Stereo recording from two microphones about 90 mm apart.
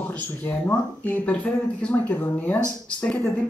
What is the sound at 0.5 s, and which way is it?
Speech, 20° left (ahead or behind).